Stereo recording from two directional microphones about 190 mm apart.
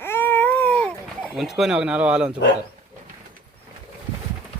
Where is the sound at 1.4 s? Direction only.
Centre (ahead or behind).